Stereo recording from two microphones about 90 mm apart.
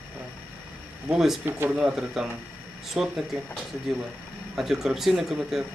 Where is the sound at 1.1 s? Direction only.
5° right (ahead or behind).